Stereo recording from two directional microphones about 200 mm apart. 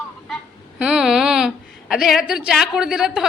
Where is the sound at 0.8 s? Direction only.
5° right (ahead or behind).